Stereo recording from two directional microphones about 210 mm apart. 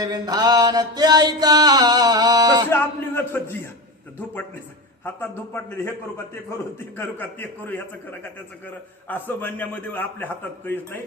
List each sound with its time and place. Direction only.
0.0 s mantra: 20° right (ahead or behind)
2.6 s a sound: 10° left (ahead or behind)
5.0 s a man's voice: 10° left (ahead or behind)